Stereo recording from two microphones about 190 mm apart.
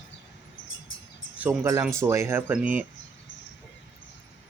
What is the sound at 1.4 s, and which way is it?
Speech, 10° right (ahead or behind).